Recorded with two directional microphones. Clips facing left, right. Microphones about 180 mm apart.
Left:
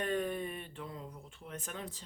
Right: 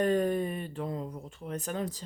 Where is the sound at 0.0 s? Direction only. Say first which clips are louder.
Right 8 dB; 40° right (ahead or behind).